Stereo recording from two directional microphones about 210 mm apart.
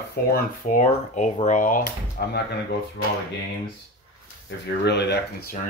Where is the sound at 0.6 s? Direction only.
35° left (ahead or behind).